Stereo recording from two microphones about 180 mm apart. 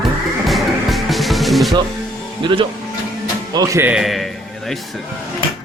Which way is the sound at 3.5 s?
20° right (ahead or behind).